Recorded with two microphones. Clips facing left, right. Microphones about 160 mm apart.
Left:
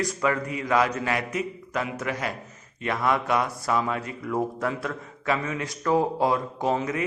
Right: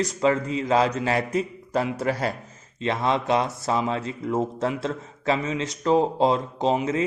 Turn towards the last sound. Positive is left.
turn(degrees=-20)  # may be behind; listen again after turning